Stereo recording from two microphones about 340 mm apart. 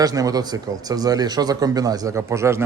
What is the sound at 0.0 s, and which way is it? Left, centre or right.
Speech, centre.